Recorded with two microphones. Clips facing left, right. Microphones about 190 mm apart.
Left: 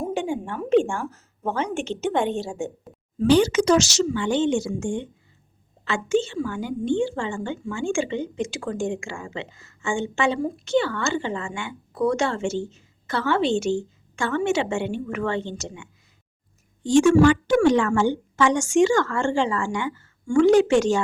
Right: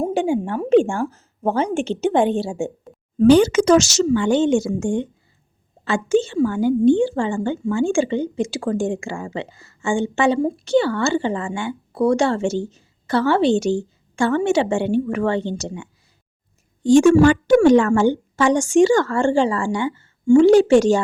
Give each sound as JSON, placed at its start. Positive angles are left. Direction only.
{"t": 0.0, "sound": "a woman's voice", "side_deg": -35}
{"t": 3.2, "sound": "a woman's voice", "side_deg": -50}